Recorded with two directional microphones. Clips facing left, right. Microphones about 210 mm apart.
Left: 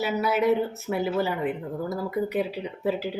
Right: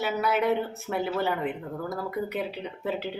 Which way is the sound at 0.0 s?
Centre (ahead or behind).